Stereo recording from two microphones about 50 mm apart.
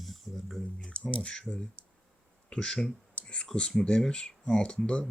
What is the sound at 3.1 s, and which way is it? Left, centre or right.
Clicking, left.